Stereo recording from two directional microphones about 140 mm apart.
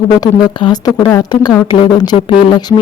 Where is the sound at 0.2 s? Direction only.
30° left (ahead or behind).